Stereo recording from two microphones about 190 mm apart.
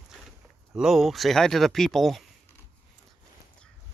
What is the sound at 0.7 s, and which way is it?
Speech, centre (ahead or behind).